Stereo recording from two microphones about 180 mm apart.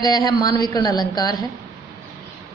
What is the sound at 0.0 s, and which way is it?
A woman's voice, 25° left (ahead or behind).